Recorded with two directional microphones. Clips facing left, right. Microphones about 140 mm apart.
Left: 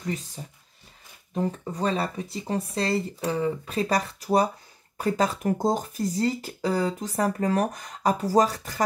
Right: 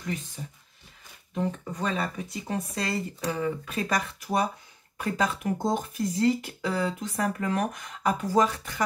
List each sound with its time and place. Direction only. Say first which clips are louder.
1.3 s speech: left 2 dB; 35° left (ahead or behind)